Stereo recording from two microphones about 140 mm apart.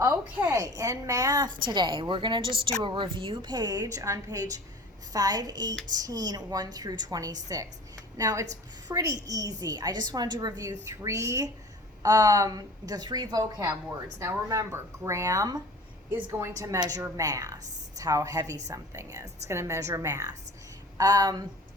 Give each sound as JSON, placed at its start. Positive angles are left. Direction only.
{"t": 0.0, "sound": "a woman's voice", "side_deg": -15}